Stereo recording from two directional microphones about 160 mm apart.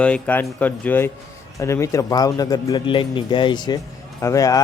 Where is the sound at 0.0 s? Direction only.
10° left (ahead or behind).